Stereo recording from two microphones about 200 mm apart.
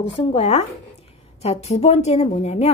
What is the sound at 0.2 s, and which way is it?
A woman's voice, 30° left (ahead or behind).